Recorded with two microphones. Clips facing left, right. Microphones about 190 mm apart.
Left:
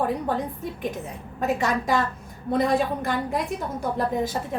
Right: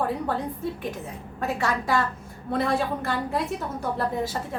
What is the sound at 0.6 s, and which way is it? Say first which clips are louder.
A woman's voice: even; 15° left (ahead or behind).